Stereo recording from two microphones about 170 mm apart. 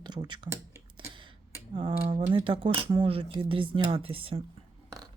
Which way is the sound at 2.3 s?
30° right (ahead or behind).